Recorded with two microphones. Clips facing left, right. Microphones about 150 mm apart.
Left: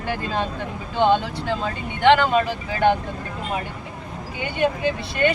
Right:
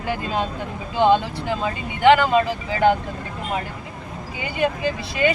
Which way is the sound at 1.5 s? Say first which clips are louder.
Right 1 dB; 10° right (ahead or behind).